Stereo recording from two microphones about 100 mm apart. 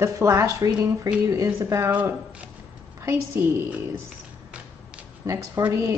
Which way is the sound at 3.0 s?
25° right (ahead or behind).